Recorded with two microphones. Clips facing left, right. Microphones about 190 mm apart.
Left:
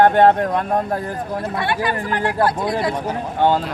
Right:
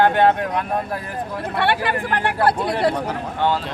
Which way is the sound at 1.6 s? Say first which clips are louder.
Right 3 dB; 65° right (ahead or behind).